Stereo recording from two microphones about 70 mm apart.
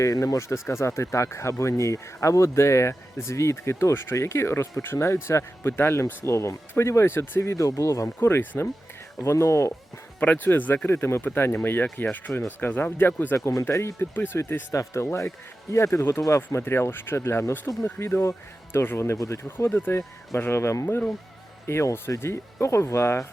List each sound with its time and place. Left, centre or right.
0.0 s speech: left
10.2 s speech: left
10.8 s speech: left
13.3 s speech: left
14.7 s speech: left
19.5 s speech: left